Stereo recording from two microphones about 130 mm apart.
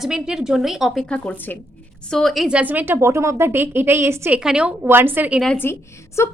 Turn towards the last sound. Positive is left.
turn(degrees=20)  # may be behind; listen again after turning